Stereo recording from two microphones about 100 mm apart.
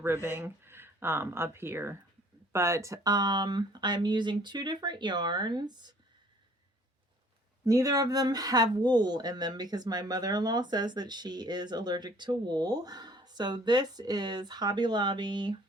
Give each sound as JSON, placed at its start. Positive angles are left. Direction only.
{"t": 0.0, "sound": "speech", "side_deg": -25}
{"t": 7.6, "sound": "speech", "side_deg": -35}